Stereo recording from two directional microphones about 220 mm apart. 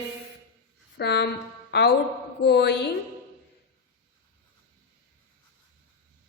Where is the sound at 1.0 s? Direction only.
50° left (ahead or behind).